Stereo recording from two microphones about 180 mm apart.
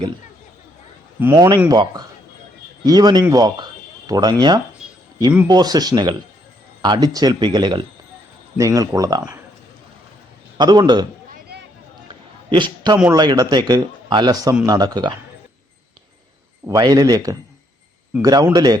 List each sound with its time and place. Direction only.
1.2 s a man's voice: 15° right (ahead or behind)
4.8 s a sound: 5° right (ahead or behind)
5.5 s a man's voice: 20° right (ahead or behind)
10.6 s a man's voice: 25° right (ahead or behind)
12.0 s a sound: 25° right (ahead or behind)
13.1 s a man's voice: 25° right (ahead or behind)
16.6 s a man's voice: 20° right (ahead or behind)